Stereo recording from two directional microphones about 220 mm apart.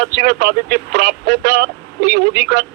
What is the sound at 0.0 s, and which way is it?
Speech, 45° right (ahead or behind).